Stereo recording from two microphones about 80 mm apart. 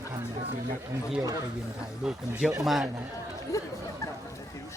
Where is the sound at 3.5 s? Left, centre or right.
Left.